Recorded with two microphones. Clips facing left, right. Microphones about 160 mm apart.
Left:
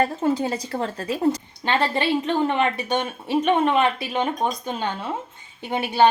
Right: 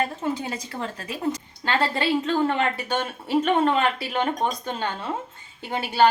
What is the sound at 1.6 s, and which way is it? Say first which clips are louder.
A woman's voice: left 2 dB; 20° left (ahead or behind).